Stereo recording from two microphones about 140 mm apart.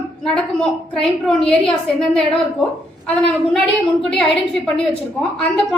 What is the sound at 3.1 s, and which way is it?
A woman's voice, 5° left (ahead or behind).